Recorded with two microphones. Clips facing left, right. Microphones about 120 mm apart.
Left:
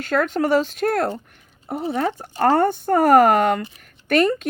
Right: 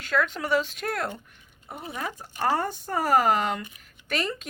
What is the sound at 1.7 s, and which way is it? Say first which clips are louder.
Speech: left 11 dB; 60° left (ahead or behind).